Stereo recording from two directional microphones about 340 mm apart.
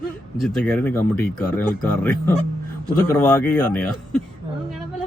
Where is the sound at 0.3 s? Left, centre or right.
Centre.